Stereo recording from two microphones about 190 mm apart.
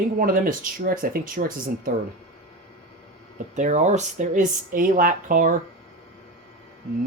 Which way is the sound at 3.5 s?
40° right (ahead or behind).